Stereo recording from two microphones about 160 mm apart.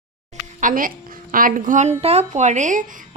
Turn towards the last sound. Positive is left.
turn(degrees=-55)  # may be behind; listen again after turning